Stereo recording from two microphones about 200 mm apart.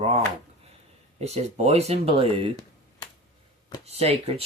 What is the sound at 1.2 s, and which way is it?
Speech, 30° right (ahead or behind).